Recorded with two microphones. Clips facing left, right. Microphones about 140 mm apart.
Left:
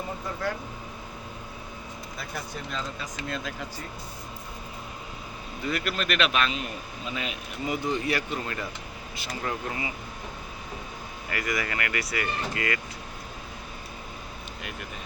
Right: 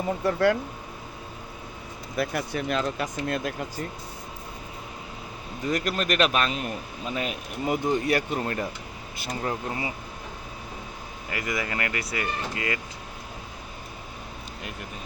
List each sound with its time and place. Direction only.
0.3 s speech: 70° right (ahead or behind)
2.1 s speech: 70° right (ahead or behind)
3.2 s speech: 55° right (ahead or behind)
5.6 s a man's voice: 40° right (ahead or behind)
11.3 s speech: 20° right (ahead or behind)